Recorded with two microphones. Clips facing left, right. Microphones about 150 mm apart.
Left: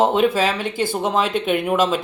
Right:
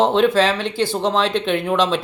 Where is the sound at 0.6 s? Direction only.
50° left (ahead or behind).